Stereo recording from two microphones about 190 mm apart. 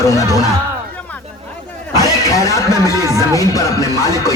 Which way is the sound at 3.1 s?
15° left (ahead or behind).